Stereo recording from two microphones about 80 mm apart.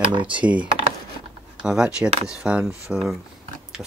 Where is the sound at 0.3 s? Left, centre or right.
Centre.